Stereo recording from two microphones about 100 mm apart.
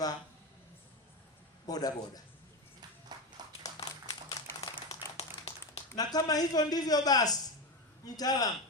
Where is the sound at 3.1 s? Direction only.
40° right (ahead or behind).